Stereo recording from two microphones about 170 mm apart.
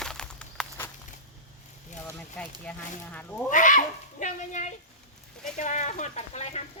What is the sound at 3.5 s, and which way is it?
Speech, 50° left (ahead or behind).